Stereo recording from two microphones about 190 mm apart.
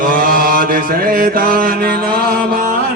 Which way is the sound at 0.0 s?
50° right (ahead or behind).